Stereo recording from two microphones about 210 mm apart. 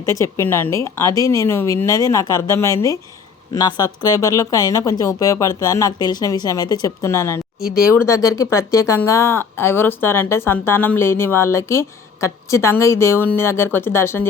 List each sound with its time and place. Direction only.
0.0 s speech: 15° left (ahead or behind)